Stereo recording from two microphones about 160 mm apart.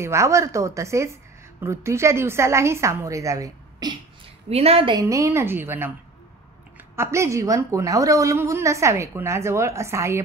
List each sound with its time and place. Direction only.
0.0 s a woman's voice: 20° right (ahead or behind)
4.5 s a woman's voice: 40° right (ahead or behind)
4.9 s a woman's voice: 20° right (ahead or behind)
7.0 s a woman's voice: 20° right (ahead or behind)